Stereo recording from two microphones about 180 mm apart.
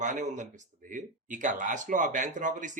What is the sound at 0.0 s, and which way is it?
Speech, 40° right (ahead or behind).